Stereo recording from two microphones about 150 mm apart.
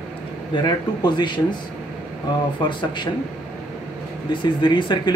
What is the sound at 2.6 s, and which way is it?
Speech, 30° left (ahead or behind).